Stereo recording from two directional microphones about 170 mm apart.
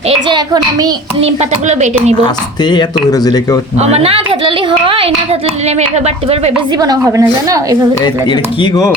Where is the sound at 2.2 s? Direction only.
25° left (ahead or behind).